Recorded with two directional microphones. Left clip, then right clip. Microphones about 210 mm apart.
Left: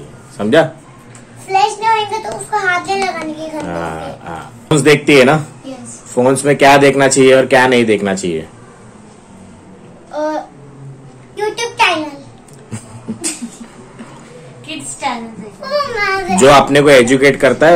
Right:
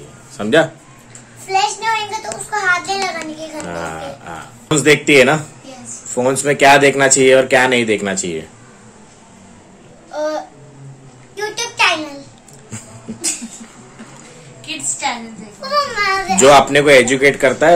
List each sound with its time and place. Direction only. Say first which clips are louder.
0.4 s a child's voice: left 2 dB; 5° right (ahead or behind)
3.6 s speech: left 1 dB; centre (ahead or behind)
10.1 s babbling: left 2 dB; 5° left (ahead or behind)
11.3 s a sound: left 4 dB; 15° right (ahead or behind)
15.7 s a sound: left 1 dB; 15° right (ahead or behind)
16.3 s speech: left 2 dB; centre (ahead or behind)